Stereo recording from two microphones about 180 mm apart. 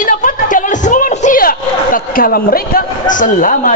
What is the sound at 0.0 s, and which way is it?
Music, 45° left (ahead or behind).